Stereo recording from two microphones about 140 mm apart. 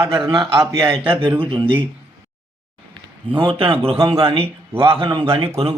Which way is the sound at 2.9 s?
40° right (ahead or behind).